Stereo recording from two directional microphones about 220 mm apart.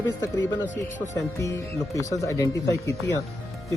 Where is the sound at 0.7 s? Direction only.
35° left (ahead or behind).